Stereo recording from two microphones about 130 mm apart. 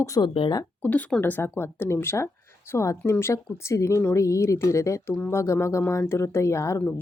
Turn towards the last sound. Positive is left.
turn(degrees=20)  # may be behind; listen again after turning